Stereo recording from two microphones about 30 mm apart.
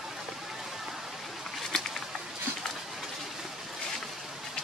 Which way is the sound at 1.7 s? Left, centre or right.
Centre.